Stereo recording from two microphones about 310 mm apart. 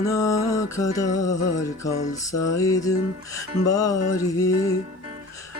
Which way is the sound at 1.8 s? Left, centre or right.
Centre.